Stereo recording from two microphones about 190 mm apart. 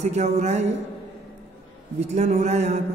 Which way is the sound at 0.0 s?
35° right (ahead or behind).